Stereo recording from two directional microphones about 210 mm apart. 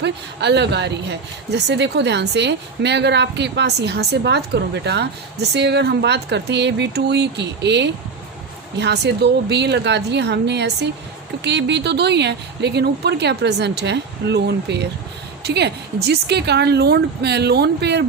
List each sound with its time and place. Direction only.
0.0 s a woman's voice: 55° right (ahead or behind)